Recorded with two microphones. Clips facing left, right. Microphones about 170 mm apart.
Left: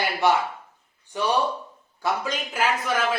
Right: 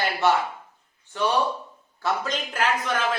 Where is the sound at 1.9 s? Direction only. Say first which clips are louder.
Even; 10° left (ahead or behind).